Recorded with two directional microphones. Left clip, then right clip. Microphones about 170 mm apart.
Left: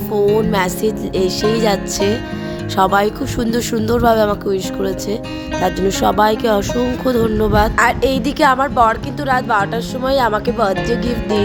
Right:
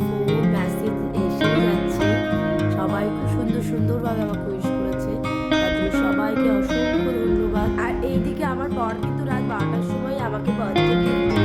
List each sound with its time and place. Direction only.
2.7 s speech: 70° left (ahead or behind)
6.0 s speech: 60° left (ahead or behind)